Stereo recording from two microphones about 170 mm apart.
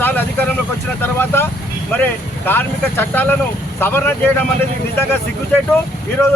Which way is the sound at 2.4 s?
10° left (ahead or behind).